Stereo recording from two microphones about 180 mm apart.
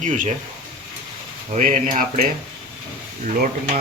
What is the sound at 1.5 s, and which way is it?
Speech, 45° right (ahead or behind).